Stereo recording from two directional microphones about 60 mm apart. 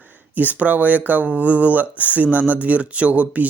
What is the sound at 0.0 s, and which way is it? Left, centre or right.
Speech, right.